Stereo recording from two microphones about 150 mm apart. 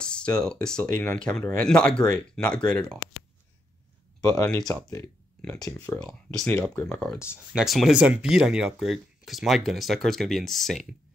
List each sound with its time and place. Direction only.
0.0 s speech: 5° left (ahead or behind)
4.3 s speech: 25° left (ahead or behind)
5.9 s speech: 5° left (ahead or behind)